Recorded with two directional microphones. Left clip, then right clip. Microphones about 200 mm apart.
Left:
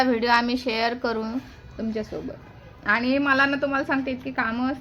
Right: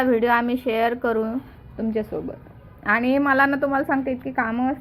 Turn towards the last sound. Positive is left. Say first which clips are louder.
# right 2 dB
turn(degrees=0)  # may be behind; listen again after turning